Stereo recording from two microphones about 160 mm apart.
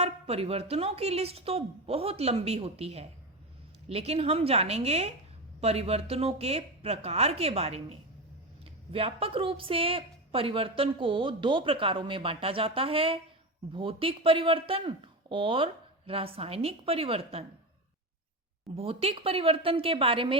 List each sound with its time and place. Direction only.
0.0 s a woman's voice: 40° right (ahead or behind)
18.8 s a woman's voice: 35° right (ahead or behind)